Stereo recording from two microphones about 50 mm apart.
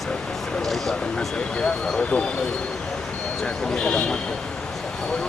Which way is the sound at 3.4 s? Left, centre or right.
Centre.